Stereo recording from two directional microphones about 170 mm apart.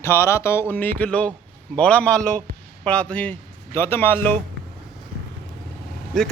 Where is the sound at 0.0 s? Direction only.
15° left (ahead or behind).